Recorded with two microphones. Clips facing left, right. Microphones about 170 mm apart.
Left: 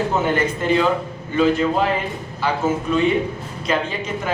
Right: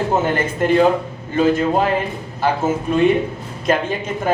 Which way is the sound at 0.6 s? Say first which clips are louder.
Right 6 dB; 50° right (ahead or behind).